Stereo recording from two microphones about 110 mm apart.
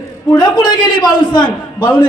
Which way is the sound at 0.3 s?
40° left (ahead or behind).